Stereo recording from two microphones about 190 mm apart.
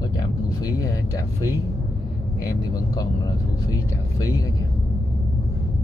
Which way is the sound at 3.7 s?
20° left (ahead or behind).